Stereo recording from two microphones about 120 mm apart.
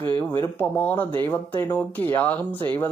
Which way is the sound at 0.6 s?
15° left (ahead or behind).